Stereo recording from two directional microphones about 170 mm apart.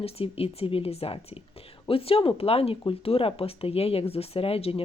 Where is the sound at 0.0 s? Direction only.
35° left (ahead or behind).